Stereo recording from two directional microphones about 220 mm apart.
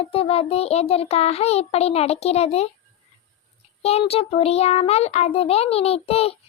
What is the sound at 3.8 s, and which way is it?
A child's voice, 25° left (ahead or behind).